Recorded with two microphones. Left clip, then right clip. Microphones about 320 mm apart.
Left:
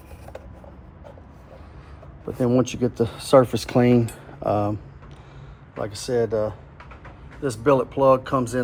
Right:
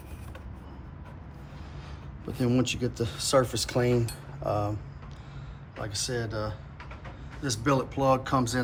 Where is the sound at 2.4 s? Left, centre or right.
Centre.